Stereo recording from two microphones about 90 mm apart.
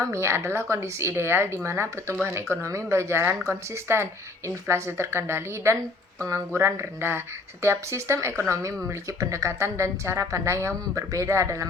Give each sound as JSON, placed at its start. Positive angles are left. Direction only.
{"t": 0.0, "sound": "a woman's voice", "side_deg": -30}